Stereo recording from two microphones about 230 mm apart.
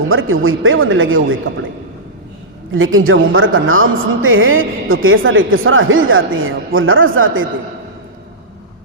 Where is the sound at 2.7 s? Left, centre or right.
Right.